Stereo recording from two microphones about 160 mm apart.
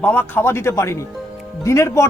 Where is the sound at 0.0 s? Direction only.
10° left (ahead or behind).